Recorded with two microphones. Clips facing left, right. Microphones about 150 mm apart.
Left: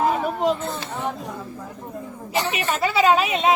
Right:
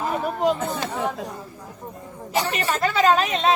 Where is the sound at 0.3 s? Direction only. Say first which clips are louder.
Even; centre (ahead or behind).